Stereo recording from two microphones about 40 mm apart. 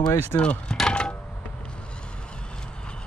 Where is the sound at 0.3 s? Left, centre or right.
Left.